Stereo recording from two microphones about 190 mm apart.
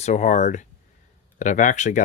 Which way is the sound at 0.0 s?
40° left (ahead or behind).